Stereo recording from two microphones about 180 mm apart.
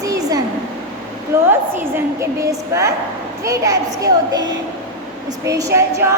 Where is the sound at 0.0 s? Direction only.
20° right (ahead or behind).